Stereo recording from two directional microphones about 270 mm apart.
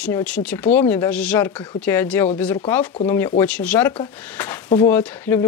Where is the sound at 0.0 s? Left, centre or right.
Centre.